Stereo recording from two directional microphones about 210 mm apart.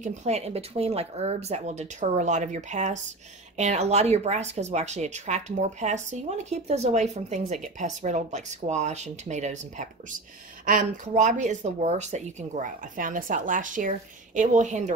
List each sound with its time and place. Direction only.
0.0 s speech: 35° right (ahead or behind)